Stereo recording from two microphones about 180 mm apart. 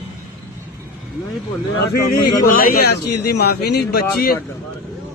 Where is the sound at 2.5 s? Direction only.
55° left (ahead or behind).